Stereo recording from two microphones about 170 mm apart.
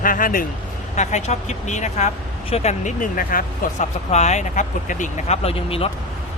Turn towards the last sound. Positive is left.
turn(degrees=35)  # may be behind; listen again after turning